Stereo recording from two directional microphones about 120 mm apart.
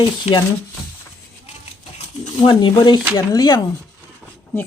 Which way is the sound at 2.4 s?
40° left (ahead or behind).